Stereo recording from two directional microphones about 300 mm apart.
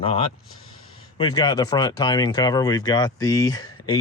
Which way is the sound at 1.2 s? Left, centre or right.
Centre.